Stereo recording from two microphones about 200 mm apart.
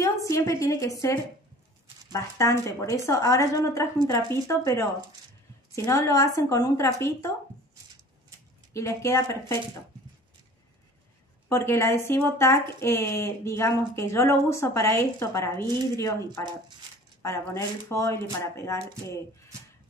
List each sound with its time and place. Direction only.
0.0 s a woman's voice: 15° left (ahead or behind)
2.1 s speech: 15° left (ahead or behind)
5.9 s speech: 15° left (ahead or behind)
8.7 s speech: 15° left (ahead or behind)
11.4 s speech: 15° left (ahead or behind)